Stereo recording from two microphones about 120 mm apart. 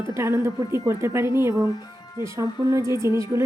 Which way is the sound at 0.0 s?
25° right (ahead or behind).